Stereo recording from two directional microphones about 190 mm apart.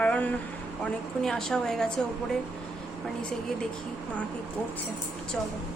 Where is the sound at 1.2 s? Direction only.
Centre (ahead or behind).